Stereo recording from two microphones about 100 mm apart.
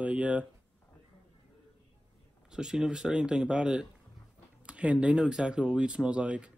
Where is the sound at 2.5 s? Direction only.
5° right (ahead or behind).